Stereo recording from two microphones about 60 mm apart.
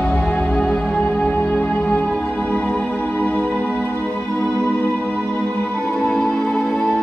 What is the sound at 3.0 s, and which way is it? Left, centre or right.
Music, left.